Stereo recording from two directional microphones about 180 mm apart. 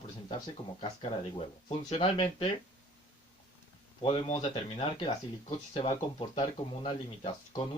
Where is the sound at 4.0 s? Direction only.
30° left (ahead or behind).